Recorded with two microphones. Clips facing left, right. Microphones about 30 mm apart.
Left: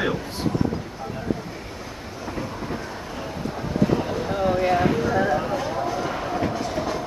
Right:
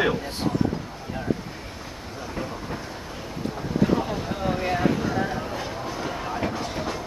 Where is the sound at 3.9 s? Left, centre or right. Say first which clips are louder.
Left 3 dB; centre.